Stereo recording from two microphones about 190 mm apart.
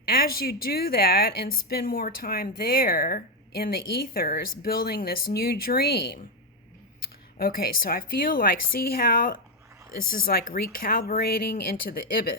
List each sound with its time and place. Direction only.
0.0 s a woman's voice: 50° left (ahead or behind)
7.3 s a woman's voice: 50° left (ahead or behind)